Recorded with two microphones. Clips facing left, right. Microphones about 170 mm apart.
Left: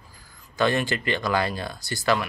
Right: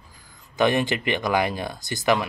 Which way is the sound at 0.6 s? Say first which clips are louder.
Right 2 dB; 20° right (ahead or behind).